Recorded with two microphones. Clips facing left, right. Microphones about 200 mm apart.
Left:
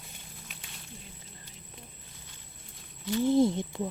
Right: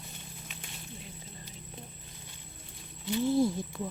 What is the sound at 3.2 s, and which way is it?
Speech, 15° left (ahead or behind).